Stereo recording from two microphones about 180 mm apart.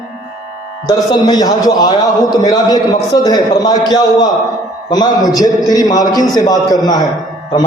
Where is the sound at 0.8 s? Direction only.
20° left (ahead or behind).